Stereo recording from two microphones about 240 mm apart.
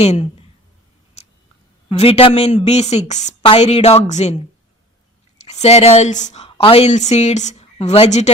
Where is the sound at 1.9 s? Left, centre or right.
Left.